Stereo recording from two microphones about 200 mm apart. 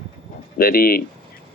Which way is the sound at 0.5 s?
50° left (ahead or behind).